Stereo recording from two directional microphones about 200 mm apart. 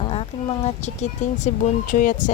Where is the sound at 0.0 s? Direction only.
30° left (ahead or behind).